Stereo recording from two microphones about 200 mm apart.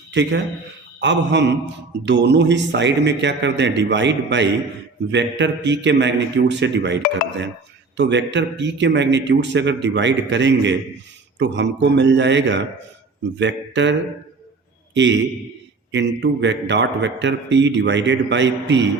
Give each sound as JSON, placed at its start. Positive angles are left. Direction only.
{"t": 0.1, "sound": "a man's voice", "side_deg": -60}
{"t": 15.9, "sound": "a man's voice", "side_deg": -60}